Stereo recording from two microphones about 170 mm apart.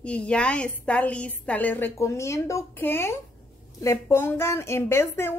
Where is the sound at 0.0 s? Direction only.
5° left (ahead or behind).